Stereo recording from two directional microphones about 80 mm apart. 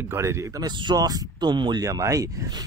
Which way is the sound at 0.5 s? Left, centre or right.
Right.